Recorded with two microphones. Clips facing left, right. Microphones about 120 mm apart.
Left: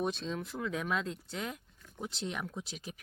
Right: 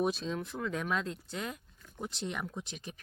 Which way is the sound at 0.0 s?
5° right (ahead or behind).